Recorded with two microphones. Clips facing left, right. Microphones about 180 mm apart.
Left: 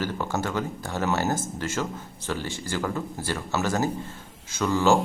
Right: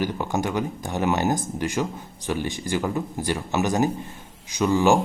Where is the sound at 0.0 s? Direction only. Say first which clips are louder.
Right 3 dB; 15° right (ahead or behind).